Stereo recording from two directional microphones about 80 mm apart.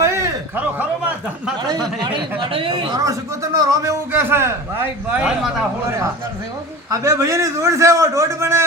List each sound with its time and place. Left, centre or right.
0.0 s a sound: right
2.4 s speech: right
3.0 s speech: right
4.1 s a man's voice: right
5.2 s a man's voice: centre
6.9 s a man's voice: right